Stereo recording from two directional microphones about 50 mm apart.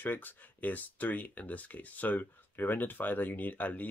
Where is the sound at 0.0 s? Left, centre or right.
Left.